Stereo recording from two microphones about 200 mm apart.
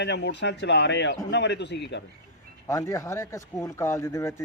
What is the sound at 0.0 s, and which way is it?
A man's voice, 60° left (ahead or behind).